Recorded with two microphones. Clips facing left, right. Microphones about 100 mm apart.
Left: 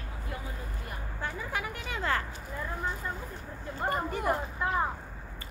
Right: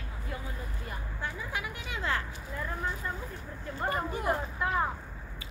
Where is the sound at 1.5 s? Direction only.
45° left (ahead or behind).